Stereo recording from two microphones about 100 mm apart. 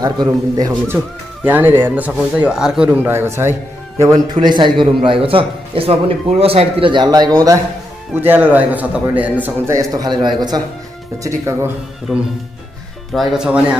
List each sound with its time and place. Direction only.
0.0 s a man's voice: 45° right (ahead or behind)
0.9 s speech: 20° right (ahead or behind)
3.0 s speech: 25° right (ahead or behind)
4.4 s a man's voice: 50° right (ahead or behind)
7.1 s speech: 40° right (ahead or behind)
8.3 s speech: 15° right (ahead or behind)
9.7 s a man's voice: 35° right (ahead or behind)
11.2 s speech: 30° right (ahead or behind)
13.1 s speech: 5° right (ahead or behind)